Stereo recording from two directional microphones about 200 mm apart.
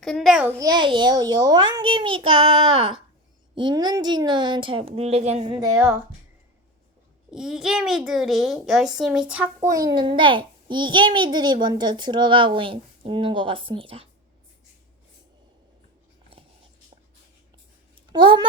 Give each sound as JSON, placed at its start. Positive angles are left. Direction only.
{"t": 0.0, "sound": "a child's voice", "side_deg": 0}
{"t": 0.6, "sound": "a child's voice", "side_deg": -20}
{"t": 5.5, "sound": "speech", "side_deg": -15}
{"t": 7.3, "sound": "a child's voice", "side_deg": -5}
{"t": 18.1, "sound": "a child's voice", "side_deg": -25}